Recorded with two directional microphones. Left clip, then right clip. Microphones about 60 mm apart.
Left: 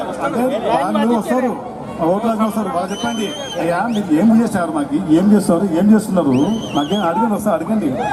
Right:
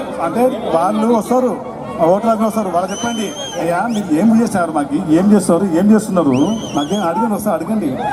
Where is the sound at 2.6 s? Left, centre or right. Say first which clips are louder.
Right 3 dB; right.